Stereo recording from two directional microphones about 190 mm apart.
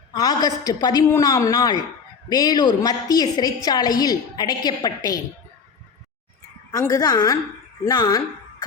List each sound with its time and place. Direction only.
0.1 s a woman's voice: 20° left (ahead or behind)
6.7 s a woman's voice: 15° left (ahead or behind)